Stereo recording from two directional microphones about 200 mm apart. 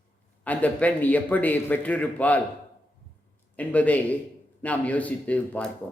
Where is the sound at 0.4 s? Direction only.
5° left (ahead or behind).